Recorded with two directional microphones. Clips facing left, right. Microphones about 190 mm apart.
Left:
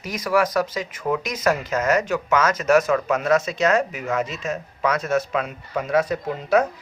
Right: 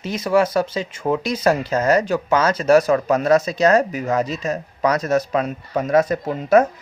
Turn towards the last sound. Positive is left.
turn(degrees=-45)  # may be behind; listen again after turning